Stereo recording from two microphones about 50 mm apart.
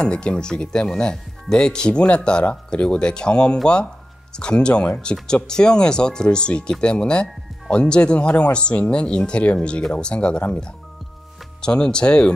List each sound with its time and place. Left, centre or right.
0.0 s speech: centre
11.6 s speech: centre